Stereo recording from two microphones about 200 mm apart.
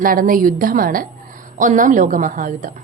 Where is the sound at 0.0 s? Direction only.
45° right (ahead or behind).